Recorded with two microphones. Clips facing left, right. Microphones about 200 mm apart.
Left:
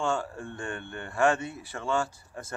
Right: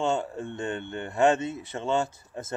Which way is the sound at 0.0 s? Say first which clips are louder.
Right 3 dB; 20° right (ahead or behind).